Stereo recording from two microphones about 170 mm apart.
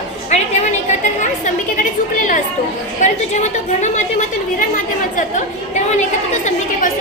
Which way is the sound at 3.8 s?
45° left (ahead or behind).